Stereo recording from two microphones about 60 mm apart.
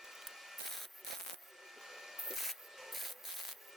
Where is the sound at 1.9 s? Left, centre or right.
Centre.